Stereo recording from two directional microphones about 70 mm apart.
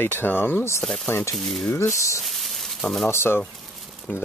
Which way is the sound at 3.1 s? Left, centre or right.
Left.